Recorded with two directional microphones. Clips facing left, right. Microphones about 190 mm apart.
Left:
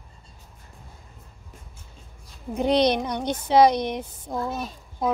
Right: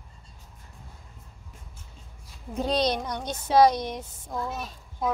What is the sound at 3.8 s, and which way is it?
Speech, 60° left (ahead or behind).